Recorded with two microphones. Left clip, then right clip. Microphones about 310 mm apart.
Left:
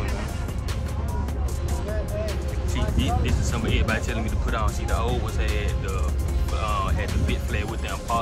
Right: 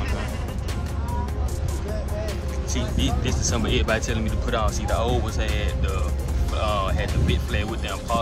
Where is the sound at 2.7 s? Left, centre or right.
Centre.